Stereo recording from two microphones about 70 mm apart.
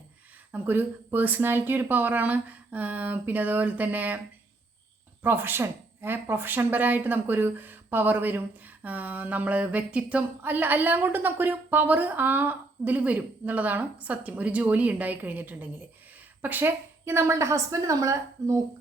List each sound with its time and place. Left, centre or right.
0.5 s a woman's voice: right
5.2 s a woman's voice: right